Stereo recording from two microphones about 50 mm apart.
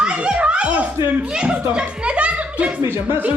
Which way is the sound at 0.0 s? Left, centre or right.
Centre.